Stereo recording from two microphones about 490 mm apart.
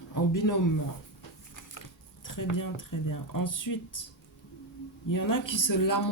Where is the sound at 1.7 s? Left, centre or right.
Left.